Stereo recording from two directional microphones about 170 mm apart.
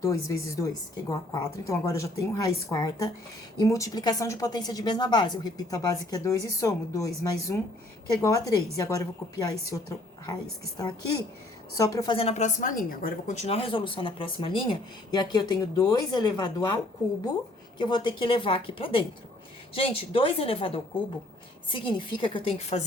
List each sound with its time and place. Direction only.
0.0 s speech: 20° left (ahead or behind)
12.1 s a woman's voice: 35° left (ahead or behind)
17.7 s a woman's voice: 25° left (ahead or behind)